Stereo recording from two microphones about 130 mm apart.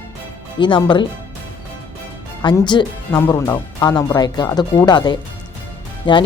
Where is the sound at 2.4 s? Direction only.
35° left (ahead or behind).